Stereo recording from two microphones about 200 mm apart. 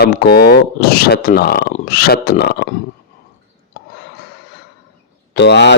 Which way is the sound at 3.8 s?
55° left (ahead or behind).